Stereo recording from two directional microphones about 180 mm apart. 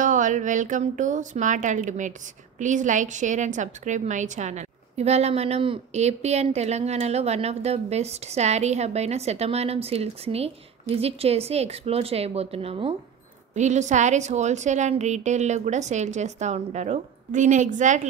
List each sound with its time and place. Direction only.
0.0 s a woman's voice: 45° right (ahead or behind)